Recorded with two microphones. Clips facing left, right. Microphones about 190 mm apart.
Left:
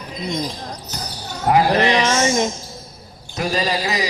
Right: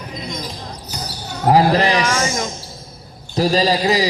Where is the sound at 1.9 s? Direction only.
30° left (ahead or behind).